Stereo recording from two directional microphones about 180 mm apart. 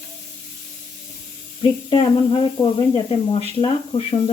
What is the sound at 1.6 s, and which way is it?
Speech, 30° left (ahead or behind).